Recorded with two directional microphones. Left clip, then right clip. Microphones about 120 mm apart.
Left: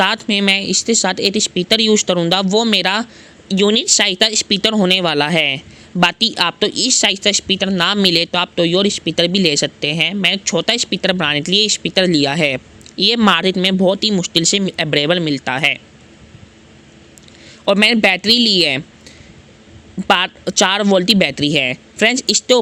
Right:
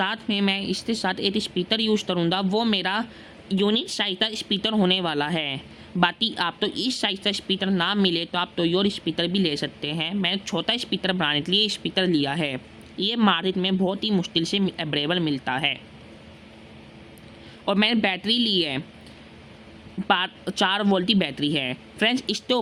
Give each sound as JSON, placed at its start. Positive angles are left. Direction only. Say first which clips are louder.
{"t": 0.0, "sound": "speech", "louder": "left 10 dB", "side_deg": 45}
{"t": 17.7, "sound": "speech", "louder": "left 10 dB", "side_deg": 35}
{"t": 20.1, "sound": "speech", "louder": "left 8 dB", "side_deg": 40}